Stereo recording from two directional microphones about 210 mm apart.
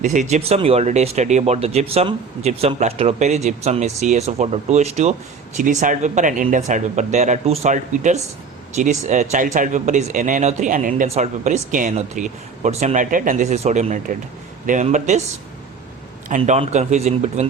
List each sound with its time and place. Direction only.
0.0 s speech: 35° right (ahead or behind)
16.3 s speech: 35° right (ahead or behind)